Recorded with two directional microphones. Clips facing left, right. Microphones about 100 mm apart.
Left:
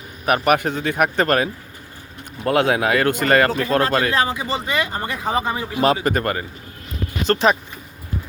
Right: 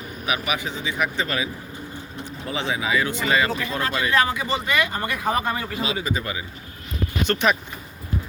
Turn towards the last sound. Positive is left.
turn(degrees=35)  # may be behind; listen again after turning